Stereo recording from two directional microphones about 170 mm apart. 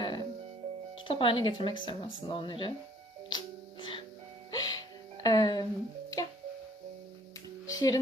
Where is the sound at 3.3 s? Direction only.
30° left (ahead or behind).